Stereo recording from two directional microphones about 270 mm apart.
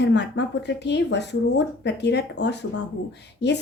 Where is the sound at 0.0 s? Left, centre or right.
Left.